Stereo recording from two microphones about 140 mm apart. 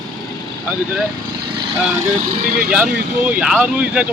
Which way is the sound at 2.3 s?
90° right.